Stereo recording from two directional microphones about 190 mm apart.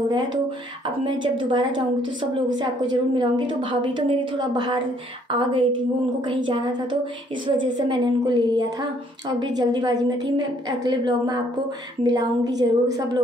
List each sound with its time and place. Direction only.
0.8 s a woman's voice: 25° right (ahead or behind)